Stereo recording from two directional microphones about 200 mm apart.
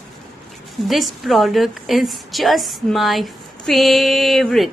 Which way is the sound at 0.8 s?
Centre (ahead or behind).